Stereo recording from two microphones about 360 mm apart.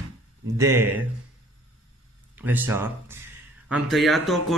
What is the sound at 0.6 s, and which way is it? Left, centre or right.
Speech, centre.